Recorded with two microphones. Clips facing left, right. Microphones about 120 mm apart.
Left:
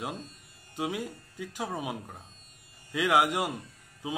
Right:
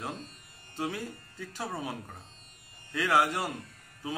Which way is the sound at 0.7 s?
15° left (ahead or behind).